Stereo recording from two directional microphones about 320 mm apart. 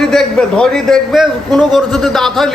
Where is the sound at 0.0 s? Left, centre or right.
Centre.